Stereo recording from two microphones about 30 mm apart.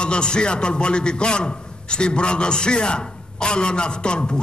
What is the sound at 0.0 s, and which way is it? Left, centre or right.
A man's voice, left.